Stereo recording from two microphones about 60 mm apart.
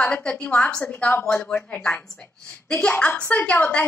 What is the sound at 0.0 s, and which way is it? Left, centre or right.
A woman's voice, centre.